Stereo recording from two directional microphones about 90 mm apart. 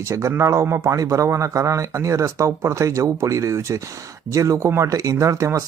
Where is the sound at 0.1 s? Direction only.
30° right (ahead or behind).